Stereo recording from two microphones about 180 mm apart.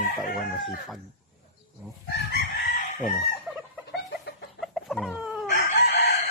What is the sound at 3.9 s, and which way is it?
Chicken, 75° left (ahead or behind).